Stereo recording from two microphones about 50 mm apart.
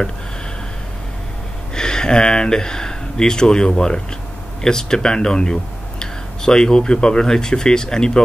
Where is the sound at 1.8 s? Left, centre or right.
Centre.